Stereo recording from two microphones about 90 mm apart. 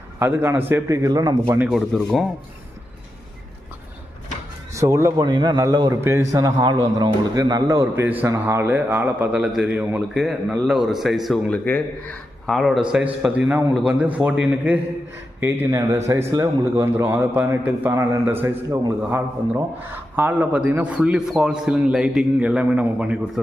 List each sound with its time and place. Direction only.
0.2 s a man's voice: 25° right (ahead or behind)
0.9 s a man's voice: 40° right (ahead or behind)
1.9 s speech: 10° left (ahead or behind)
4.7 s speech: 35° right (ahead or behind)
5.1 s a man's voice: 50° right (ahead or behind)
5.6 s a man's voice: 45° right (ahead or behind)
6.0 s a man's voice: 30° right (ahead or behind)
9.3 s a man's voice: 10° right (ahead or behind)
10.2 s a man's voice: 5° right (ahead or behind)
11.5 s speech: 15° left (ahead or behind)
12.5 s a man's voice: centre (ahead or behind)
12.9 s a man's voice: 10° right (ahead or behind)
14.5 s a man's voice: 20° right (ahead or behind)
15.4 s a man's voice: 30° right (ahead or behind); by 23.1 s 15° right (ahead or behind)